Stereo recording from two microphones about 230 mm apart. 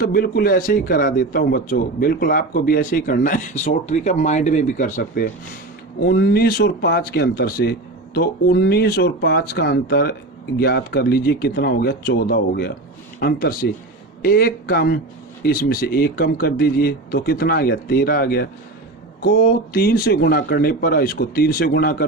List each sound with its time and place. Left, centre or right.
0.1 s a man's voice: left
19.7 s a man's voice: left